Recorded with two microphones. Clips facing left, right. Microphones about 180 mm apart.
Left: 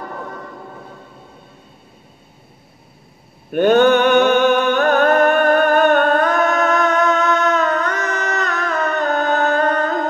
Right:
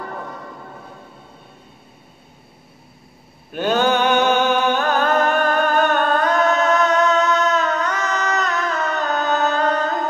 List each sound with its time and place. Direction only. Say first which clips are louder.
3.5 s music: left 6 dB; 55° left (ahead or behind)